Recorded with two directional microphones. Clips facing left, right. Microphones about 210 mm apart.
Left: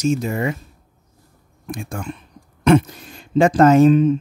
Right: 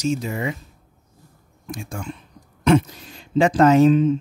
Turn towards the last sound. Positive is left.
turn(degrees=55)  # may be behind; listen again after turning